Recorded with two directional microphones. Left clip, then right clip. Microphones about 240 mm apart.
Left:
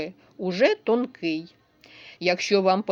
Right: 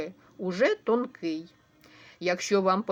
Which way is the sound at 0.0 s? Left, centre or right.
Left.